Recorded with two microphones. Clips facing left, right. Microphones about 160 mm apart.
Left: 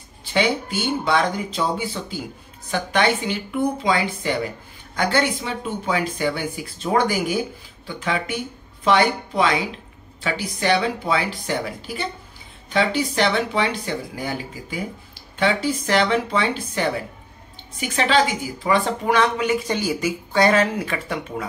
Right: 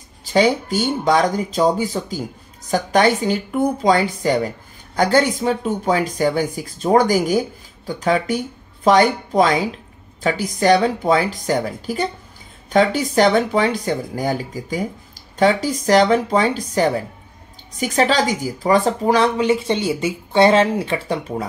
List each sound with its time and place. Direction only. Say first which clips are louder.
0.2 s a woman's voice: right 5 dB; 40° right (ahead or behind)